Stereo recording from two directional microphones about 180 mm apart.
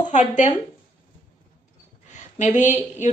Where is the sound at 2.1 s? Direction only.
45° left (ahead or behind).